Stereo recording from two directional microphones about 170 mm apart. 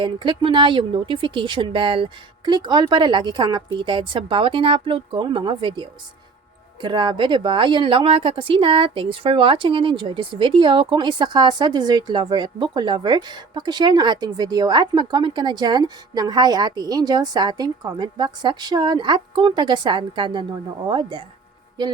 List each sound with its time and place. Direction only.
0.0 s speech: 30° right (ahead or behind)